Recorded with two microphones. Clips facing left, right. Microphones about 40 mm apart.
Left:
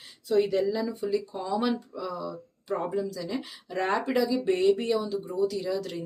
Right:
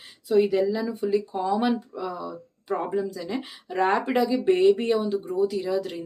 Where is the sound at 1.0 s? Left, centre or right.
Right.